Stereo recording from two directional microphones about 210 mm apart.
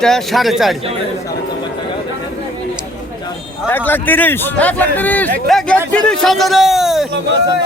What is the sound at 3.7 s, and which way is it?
A man's voice, 10° left (ahead or behind).